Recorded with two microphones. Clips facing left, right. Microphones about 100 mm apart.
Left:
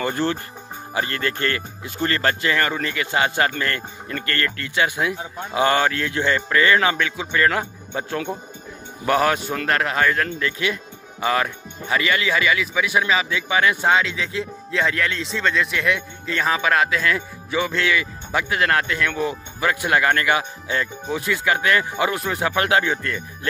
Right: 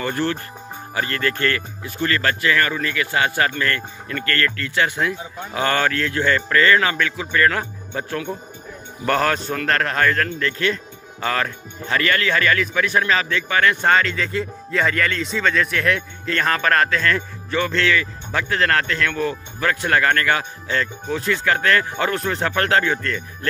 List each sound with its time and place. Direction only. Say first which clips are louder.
0.0 s speech: even; 25° left (ahead or behind)
13.8 s speech: right 1 dB; 5° left (ahead or behind)